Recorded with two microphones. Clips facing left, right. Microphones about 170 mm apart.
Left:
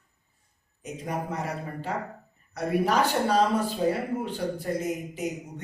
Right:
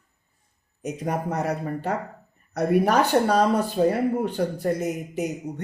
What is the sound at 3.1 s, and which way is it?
A man's voice, 50° right (ahead or behind).